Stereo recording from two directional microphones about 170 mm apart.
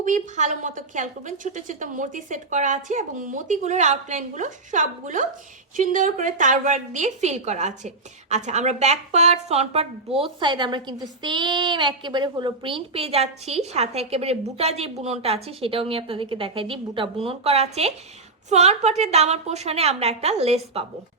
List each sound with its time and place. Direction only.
0.0 s a woman's voice: 45° right (ahead or behind)
10.2 s a woman's voice: 30° right (ahead or behind)